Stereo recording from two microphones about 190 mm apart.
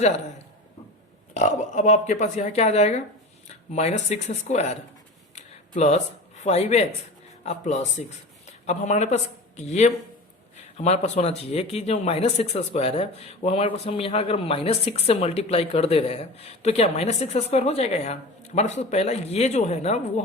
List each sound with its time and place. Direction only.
1.3 s speech: 40° left (ahead or behind)
5.3 s a sound: 35° left (ahead or behind)
7.4 s speech: 35° left (ahead or behind)